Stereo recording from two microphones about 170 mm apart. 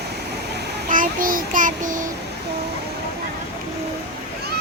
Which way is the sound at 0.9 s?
55° right (ahead or behind).